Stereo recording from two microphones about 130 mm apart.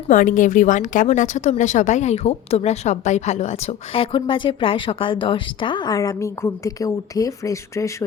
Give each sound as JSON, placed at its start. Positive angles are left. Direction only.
{"t": 0.1, "sound": "a woman's voice", "side_deg": 90}